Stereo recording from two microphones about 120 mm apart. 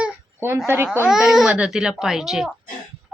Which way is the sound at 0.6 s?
10° right (ahead or behind).